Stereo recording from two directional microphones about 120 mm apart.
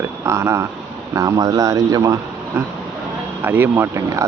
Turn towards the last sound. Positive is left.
turn(degrees=-25)  # may be behind; listen again after turning